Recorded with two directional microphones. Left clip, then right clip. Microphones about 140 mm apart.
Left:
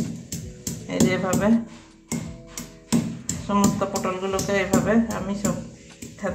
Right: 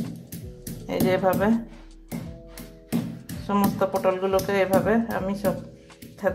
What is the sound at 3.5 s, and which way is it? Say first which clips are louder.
Speech: even; 65° right (ahead or behind).